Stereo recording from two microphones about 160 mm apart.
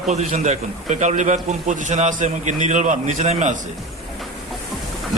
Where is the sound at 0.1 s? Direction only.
45° right (ahead or behind).